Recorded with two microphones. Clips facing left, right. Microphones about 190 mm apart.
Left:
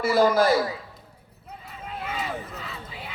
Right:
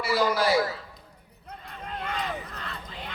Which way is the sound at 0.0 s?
50° left (ahead or behind).